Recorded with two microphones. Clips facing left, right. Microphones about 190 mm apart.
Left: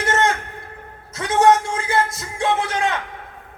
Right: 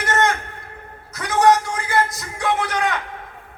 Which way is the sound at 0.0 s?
25° left (ahead or behind).